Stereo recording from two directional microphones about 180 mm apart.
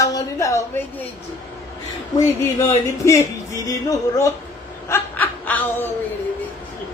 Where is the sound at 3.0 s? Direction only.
20° left (ahead or behind).